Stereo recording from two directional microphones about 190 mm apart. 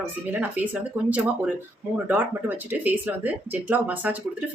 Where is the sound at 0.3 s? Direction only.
10° right (ahead or behind).